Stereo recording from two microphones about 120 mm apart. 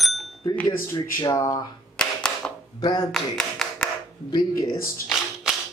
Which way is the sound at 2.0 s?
5° left (ahead or behind).